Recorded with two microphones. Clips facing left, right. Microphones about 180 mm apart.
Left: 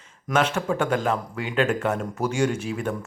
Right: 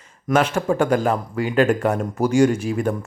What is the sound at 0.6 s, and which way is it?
Speech, 40° right (ahead or behind).